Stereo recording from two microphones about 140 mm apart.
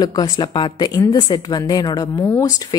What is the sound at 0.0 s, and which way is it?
A woman's voice, 30° left (ahead or behind).